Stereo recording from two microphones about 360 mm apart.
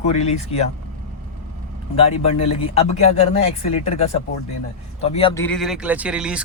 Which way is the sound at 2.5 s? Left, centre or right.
Centre.